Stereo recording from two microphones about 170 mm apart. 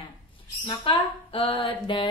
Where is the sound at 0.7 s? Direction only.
30° left (ahead or behind).